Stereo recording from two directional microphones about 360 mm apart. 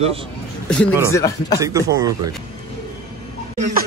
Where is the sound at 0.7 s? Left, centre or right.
Centre.